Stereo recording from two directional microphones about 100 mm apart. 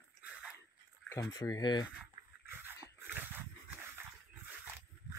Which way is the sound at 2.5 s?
20° right (ahead or behind).